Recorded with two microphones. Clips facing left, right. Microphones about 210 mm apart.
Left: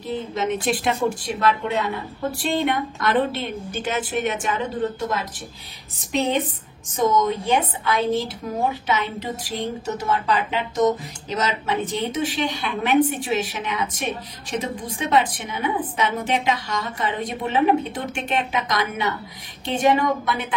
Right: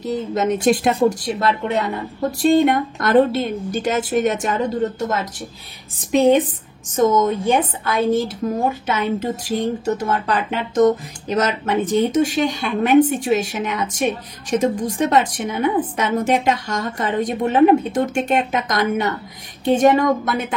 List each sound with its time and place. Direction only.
0.0 s a woman's voice: 40° right (ahead or behind)
8.8 s speech: 45° right (ahead or behind)